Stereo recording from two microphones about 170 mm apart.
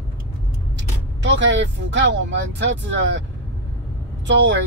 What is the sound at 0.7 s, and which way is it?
Speech, 90° right.